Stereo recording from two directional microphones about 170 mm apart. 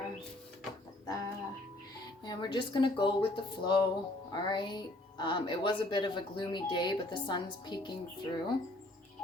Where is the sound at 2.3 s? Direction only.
25° left (ahead or behind).